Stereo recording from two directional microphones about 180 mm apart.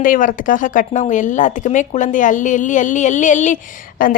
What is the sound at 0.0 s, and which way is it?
Speech, 50° left (ahead or behind).